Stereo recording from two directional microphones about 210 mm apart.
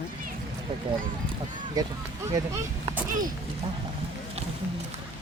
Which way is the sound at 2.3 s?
15° right (ahead or behind).